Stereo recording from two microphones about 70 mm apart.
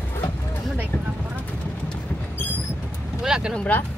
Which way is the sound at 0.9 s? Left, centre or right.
Left.